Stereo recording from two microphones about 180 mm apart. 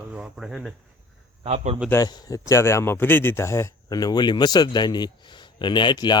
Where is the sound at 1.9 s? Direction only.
20° left (ahead or behind).